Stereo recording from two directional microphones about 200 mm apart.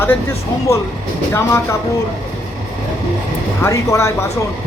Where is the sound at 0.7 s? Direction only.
15° left (ahead or behind).